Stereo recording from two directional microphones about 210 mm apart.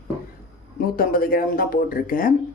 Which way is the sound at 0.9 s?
45° left (ahead or behind).